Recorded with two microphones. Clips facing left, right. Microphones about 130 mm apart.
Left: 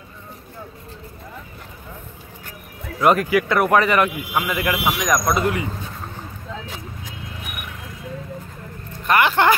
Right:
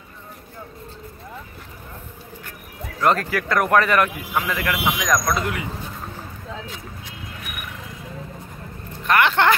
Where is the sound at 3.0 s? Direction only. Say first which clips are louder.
Left 4 dB; 10° left (ahead or behind).